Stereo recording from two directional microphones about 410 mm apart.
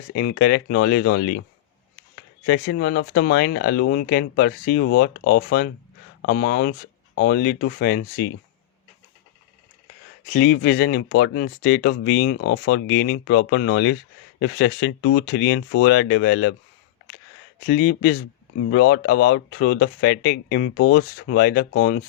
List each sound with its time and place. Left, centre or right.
0.1 s speech: left
2.5 s speech: left
10.2 s speech: centre
17.7 s speech: left